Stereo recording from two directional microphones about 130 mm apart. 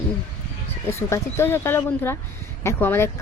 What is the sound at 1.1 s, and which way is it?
A woman's voice, 20° left (ahead or behind).